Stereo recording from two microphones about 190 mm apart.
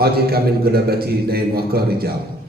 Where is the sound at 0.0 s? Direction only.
55° right (ahead or behind).